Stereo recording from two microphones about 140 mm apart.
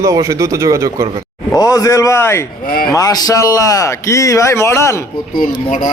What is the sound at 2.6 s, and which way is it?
Speech, 90° left.